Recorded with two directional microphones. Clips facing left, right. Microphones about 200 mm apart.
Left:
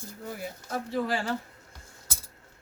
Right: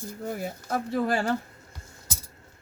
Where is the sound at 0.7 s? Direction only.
50° right (ahead or behind).